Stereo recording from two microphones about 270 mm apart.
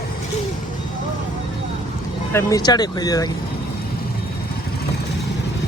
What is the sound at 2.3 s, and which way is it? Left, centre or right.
Speech, centre.